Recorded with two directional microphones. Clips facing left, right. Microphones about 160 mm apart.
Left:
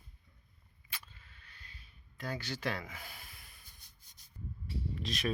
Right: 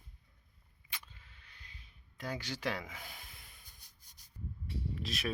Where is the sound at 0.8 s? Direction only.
15° right (ahead or behind).